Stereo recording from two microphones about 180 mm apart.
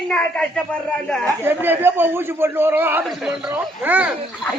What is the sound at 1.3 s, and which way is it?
A man's voice, 10° right (ahead or behind).